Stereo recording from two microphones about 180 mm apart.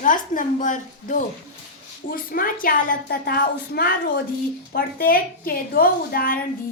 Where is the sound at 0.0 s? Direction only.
45° left (ahead or behind).